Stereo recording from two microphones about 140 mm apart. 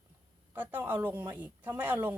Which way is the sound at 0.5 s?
15° right (ahead or behind).